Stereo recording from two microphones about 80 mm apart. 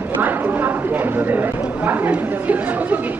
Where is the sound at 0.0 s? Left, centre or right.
Right.